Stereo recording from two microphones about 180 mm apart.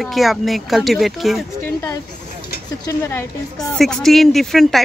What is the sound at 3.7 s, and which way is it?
Speech, centre (ahead or behind).